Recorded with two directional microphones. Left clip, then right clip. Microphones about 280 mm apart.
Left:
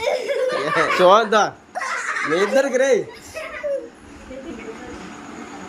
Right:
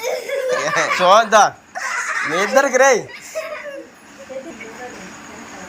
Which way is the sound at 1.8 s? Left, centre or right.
Centre.